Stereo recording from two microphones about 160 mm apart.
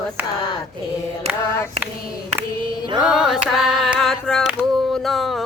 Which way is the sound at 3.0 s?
5° right (ahead or behind).